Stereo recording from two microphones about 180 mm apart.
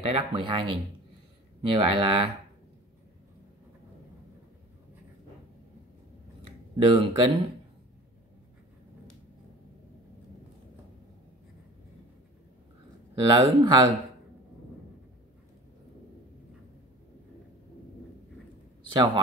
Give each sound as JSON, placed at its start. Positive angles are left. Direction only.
{"t": 0.0, "sound": "speech", "side_deg": -30}
{"t": 6.8, "sound": "speech", "side_deg": -30}
{"t": 13.1, "sound": "speech", "side_deg": -25}
{"t": 18.9, "sound": "speech", "side_deg": -25}